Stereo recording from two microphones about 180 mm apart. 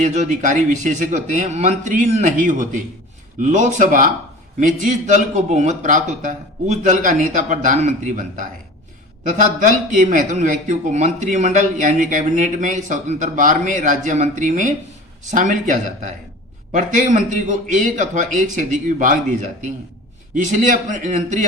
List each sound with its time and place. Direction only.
0.0 s speech: 45° right (ahead or behind)